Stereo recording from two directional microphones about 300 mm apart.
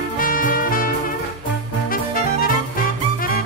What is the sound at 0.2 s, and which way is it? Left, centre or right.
Music, left.